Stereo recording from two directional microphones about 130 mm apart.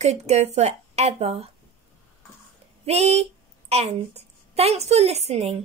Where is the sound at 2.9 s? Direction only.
55° right (ahead or behind).